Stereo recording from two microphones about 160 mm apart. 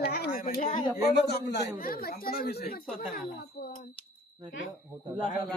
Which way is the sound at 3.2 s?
60° left (ahead or behind).